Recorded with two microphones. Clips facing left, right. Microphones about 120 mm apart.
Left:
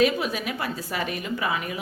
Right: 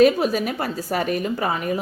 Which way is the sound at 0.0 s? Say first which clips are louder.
Right 6 dB; 40° right (ahead or behind).